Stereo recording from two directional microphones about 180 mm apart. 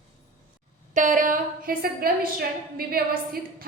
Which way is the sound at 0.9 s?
45° right (ahead or behind).